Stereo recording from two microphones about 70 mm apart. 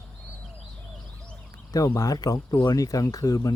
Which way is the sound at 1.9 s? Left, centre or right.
Left.